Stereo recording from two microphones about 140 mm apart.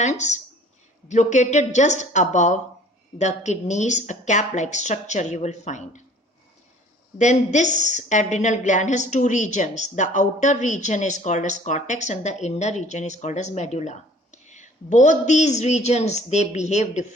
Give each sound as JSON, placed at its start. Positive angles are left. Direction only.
{"t": 0.0, "sound": "a woman's voice", "side_deg": 55}
{"t": 7.2, "sound": "a woman's voice", "side_deg": 60}